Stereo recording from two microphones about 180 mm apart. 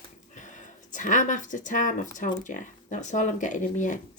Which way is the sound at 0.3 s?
45° left (ahead or behind).